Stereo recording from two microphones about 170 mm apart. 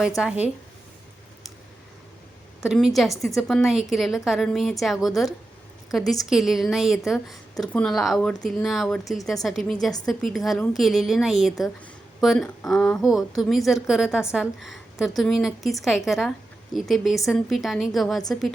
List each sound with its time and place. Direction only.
0.2 s speech: 5° right (ahead or behind)
2.6 s a woman's voice: 5° right (ahead or behind)